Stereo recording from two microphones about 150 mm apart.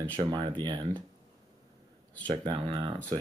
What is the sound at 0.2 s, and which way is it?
Speech, 30° right (ahead or behind).